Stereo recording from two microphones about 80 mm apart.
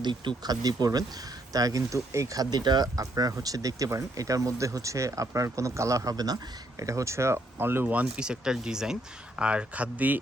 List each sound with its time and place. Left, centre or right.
0.0 s speech: right
7.9 s speech: centre